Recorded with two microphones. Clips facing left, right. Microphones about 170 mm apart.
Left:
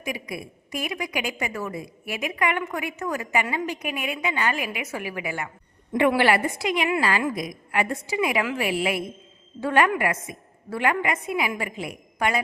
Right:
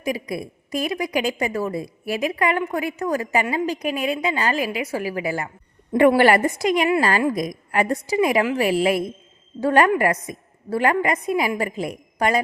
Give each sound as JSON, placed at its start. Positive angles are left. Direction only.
{"t": 0.0, "sound": "a woman's voice", "side_deg": -35}